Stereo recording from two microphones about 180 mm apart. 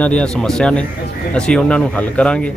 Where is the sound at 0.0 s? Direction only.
5° left (ahead or behind).